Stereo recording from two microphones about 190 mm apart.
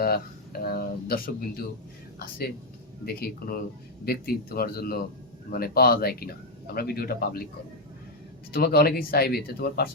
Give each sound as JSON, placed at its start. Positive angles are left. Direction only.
{"t": 0.6, "sound": "a sound", "side_deg": 50}
{"t": 2.1, "sound": "a woman's voice", "side_deg": 55}
{"t": 8.5, "sound": "speech", "side_deg": 55}